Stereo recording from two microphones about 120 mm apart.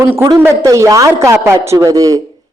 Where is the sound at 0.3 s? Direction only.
25° right (ahead or behind).